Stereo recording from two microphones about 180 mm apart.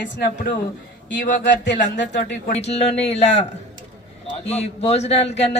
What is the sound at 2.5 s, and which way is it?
Speech, 35° left (ahead or behind).